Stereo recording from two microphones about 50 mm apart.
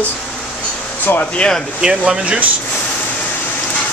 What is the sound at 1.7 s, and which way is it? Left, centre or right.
Speech, centre.